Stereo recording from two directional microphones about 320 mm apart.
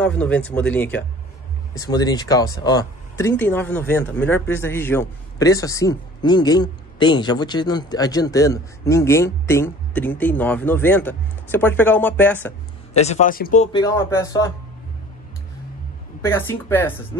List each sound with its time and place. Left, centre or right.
0.0 s speech: centre
12.9 s speech: left
16.2 s speech: centre